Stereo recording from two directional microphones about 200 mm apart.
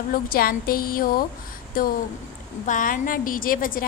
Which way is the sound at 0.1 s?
45° left (ahead or behind).